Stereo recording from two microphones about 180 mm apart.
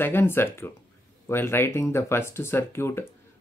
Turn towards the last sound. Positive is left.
turn(degrees=15)  # may be behind; listen again after turning